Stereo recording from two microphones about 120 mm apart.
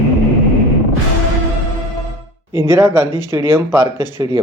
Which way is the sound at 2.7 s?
25° right (ahead or behind).